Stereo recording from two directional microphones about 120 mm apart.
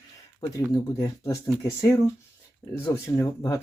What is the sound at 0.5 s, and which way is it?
Speech, 25° left (ahead or behind).